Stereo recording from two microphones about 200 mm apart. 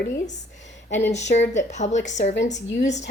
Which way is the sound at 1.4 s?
35° left (ahead or behind).